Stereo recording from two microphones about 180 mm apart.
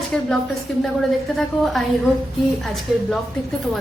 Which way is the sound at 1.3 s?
Centre (ahead or behind).